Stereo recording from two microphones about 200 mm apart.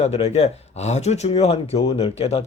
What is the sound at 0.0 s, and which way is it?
Speech, 30° left (ahead or behind).